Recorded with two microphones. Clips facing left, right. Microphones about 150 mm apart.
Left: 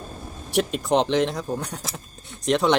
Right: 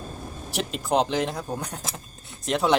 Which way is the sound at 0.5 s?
Centre (ahead or behind).